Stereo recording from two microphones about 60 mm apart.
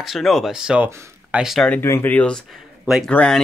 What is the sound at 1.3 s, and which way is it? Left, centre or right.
Speech, right.